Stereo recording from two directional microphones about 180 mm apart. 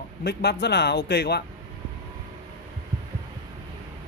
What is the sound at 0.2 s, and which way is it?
A man's voice, 65° left (ahead or behind).